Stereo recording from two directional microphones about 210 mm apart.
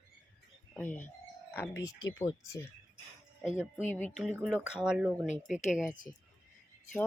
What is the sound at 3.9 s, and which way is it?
Speech, 10° left (ahead or behind).